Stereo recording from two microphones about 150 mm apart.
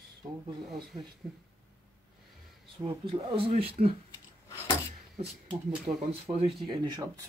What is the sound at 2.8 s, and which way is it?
Speech, 35° right (ahead or behind).